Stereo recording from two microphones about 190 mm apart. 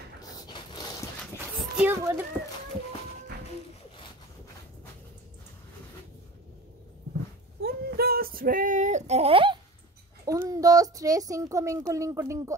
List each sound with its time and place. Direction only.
0.2 s mechanisms: 20° left (ahead or behind)
1.5 s a sound: centre (ahead or behind)
1.9 s a child's voice: 15° right (ahead or behind)
7.6 s female singing: 55° right (ahead or behind); by 9.6 s 30° right (ahead or behind)
10.2 s speech: 15° right (ahead or behind)